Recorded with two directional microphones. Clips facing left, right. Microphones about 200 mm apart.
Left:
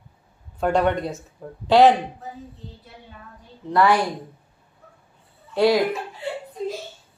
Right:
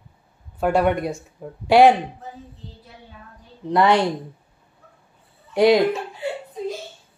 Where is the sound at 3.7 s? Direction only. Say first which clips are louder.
Right 1 dB; 20° right (ahead or behind).